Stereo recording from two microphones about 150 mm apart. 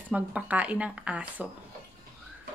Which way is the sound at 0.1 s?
10° right (ahead or behind).